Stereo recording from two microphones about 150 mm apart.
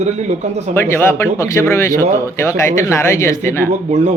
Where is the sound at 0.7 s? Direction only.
15° left (ahead or behind).